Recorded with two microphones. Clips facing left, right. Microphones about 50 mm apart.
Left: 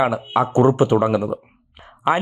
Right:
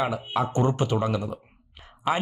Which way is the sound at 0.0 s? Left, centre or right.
Centre.